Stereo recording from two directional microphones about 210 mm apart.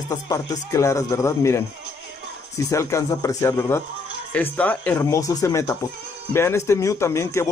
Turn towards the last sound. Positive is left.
turn(degrees=15)  # may be behind; listen again after turning